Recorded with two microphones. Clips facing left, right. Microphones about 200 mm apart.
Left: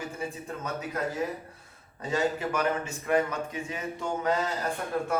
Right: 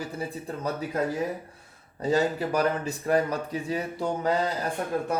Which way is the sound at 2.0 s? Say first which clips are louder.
Right 4 dB; 35° right (ahead or behind).